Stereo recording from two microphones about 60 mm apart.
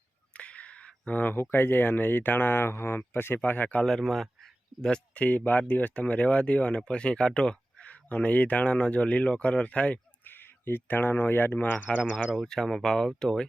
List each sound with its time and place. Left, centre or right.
0.3 s speech: left
3.8 s speech: centre
4.7 s a sound: centre
5.1 s speech: left
10.2 s speech: left
12.1 s speech: centre